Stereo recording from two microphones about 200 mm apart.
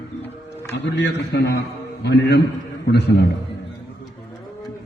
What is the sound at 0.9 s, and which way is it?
A man's voice, 60° left (ahead or behind).